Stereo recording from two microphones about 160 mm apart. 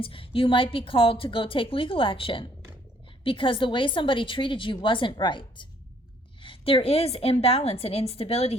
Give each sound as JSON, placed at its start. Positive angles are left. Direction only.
{"t": 0.0, "sound": "a woman's voice", "side_deg": 35}